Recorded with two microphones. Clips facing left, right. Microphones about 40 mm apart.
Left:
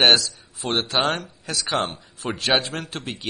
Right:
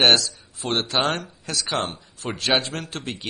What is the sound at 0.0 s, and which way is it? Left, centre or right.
Speech, centre.